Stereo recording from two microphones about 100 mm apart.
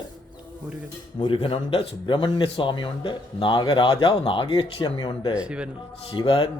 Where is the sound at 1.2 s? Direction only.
65° left (ahead or behind); by 5.3 s 45° left (ahead or behind).